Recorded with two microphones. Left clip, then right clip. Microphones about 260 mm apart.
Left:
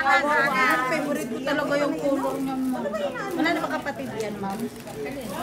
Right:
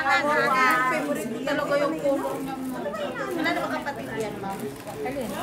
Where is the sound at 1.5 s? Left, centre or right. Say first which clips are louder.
Even; left.